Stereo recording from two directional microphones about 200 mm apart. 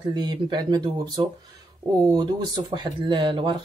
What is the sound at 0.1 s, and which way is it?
Speech, 20° right (ahead or behind).